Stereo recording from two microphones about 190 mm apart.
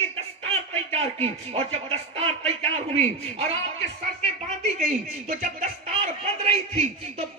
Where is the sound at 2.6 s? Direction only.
30° right (ahead or behind).